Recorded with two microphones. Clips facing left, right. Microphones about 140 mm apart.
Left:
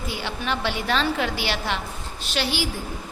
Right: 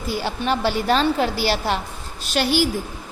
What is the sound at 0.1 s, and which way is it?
A woman's voice, 40° right (ahead or behind).